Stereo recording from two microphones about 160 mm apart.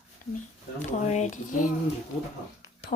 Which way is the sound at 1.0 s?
45° left (ahead or behind).